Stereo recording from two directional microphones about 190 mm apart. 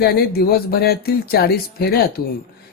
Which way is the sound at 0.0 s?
55° left (ahead or behind).